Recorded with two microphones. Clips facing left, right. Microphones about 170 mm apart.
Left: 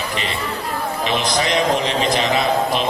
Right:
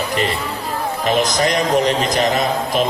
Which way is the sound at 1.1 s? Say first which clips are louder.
Right 4 dB; 45° right (ahead or behind).